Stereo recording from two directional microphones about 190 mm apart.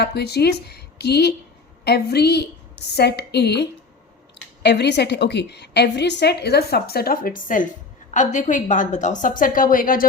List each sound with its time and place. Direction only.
0.0 s a woman's voice: 60° left (ahead or behind)